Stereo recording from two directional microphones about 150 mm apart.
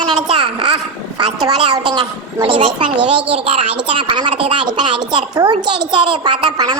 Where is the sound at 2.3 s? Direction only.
35° right (ahead or behind).